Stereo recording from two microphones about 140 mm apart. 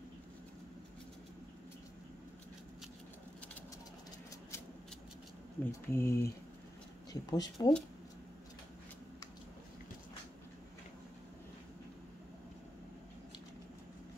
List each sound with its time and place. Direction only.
5.6 s speech: 15° left (ahead or behind)
7.1 s speech: 30° left (ahead or behind)